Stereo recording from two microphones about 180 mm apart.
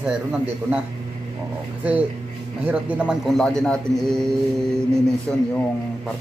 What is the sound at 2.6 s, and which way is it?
A man's voice, 10° right (ahead or behind).